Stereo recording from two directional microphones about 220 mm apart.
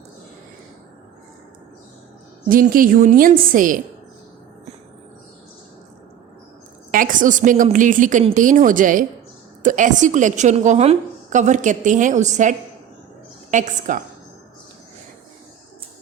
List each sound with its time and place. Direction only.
2.5 s a woman's voice: 40° right (ahead or behind)
6.9 s a woman's voice: 40° right (ahead or behind)